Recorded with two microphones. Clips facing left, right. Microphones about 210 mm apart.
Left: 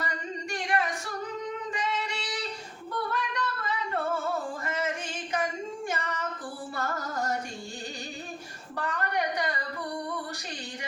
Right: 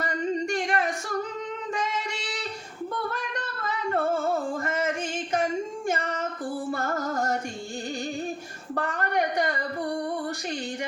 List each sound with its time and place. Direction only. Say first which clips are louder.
0.0 s singing: right 8 dB; 45° right (ahead or behind)
1.7 s female singing: right 2 dB; 45° right (ahead or behind)
3.1 s singing: left 1 dB; 45° right (ahead or behind)
5.9 s female singing: right 5 dB; 45° right (ahead or behind)
6.7 s music: right 3 dB; 45° right (ahead or behind)
8.7 s a sound: right 4 dB; 45° right (ahead or behind)